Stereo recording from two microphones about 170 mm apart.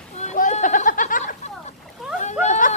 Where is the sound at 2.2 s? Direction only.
45° left (ahead or behind).